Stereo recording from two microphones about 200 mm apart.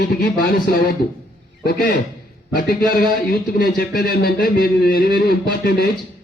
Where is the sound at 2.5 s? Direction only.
50° left (ahead or behind).